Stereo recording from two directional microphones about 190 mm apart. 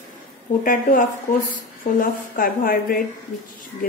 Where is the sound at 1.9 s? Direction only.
50° left (ahead or behind).